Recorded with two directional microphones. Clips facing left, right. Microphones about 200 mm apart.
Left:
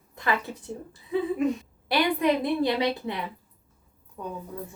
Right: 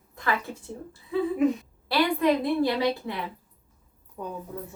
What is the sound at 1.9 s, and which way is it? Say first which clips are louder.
A woman's voice: right 1 dB; 20° left (ahead or behind).